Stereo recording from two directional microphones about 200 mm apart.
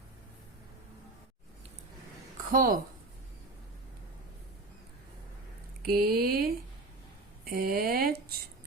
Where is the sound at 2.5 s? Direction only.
45° right (ahead or behind).